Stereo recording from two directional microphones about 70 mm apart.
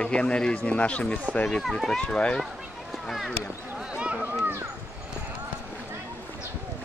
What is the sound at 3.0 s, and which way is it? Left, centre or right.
Speech, centre.